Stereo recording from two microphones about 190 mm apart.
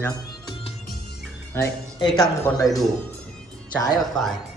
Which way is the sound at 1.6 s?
10° left (ahead or behind).